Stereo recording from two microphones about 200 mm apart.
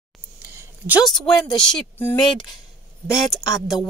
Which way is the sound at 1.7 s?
5° left (ahead or behind).